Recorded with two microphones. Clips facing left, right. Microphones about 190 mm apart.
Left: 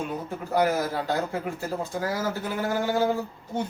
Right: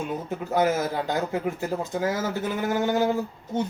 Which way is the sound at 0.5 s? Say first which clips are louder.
Right 1 dB; 20° right (ahead or behind).